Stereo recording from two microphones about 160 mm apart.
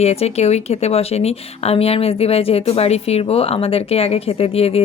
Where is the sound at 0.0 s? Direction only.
40° left (ahead or behind).